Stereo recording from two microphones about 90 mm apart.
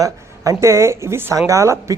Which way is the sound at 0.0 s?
35° right (ahead or behind).